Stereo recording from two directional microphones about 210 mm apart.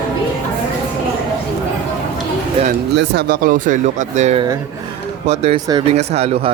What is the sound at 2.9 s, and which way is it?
A man's voice, 55° right (ahead or behind).